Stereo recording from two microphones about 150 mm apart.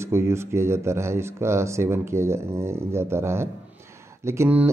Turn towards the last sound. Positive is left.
turn(degrees=-15)  # may be behind; listen again after turning